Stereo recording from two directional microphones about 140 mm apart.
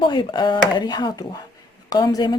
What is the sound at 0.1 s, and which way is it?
A woman's voice, 35° left (ahead or behind).